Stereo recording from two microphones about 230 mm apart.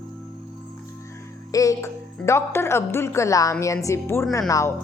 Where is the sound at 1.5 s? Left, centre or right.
Centre.